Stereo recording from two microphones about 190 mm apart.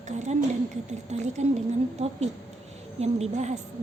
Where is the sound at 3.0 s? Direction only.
35° right (ahead or behind).